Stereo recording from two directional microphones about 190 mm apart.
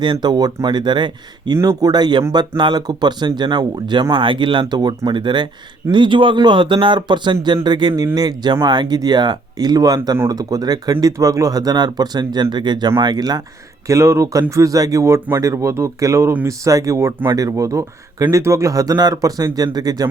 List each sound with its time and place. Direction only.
0.0 s speech: 25° right (ahead or behind)